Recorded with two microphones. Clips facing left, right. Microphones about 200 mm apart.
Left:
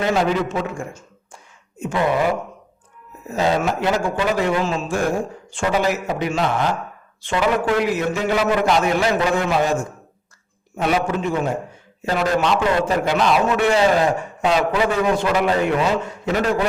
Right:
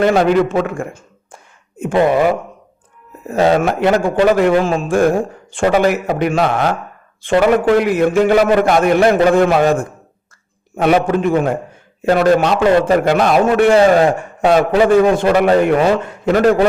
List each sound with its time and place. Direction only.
0.0 s a man's voice: 60° right (ahead or behind)
7.2 s a man's voice: 55° right (ahead or behind)